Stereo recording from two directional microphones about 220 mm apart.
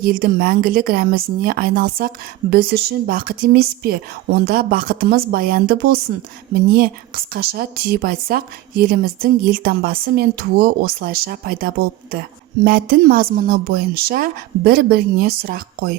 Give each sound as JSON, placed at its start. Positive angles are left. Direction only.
{"t": 0.0, "sound": "a woman's voice", "side_deg": -45}